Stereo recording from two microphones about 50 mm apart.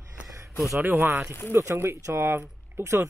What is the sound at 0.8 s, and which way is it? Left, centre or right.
Speech, right.